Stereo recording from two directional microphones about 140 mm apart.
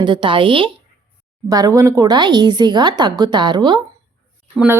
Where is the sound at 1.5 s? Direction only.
25° right (ahead or behind).